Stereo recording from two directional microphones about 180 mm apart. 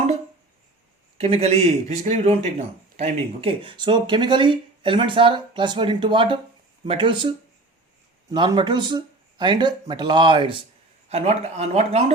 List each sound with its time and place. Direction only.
1.2 s a man's voice: 35° right (ahead or behind)